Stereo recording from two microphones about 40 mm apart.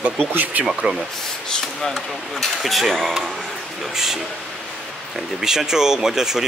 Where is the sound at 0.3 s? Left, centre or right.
Right.